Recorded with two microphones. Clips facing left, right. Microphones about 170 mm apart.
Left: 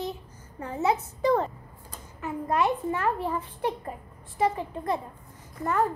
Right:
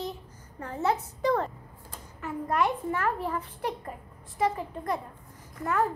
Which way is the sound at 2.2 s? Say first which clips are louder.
Left 2 dB; 20° left (ahead or behind).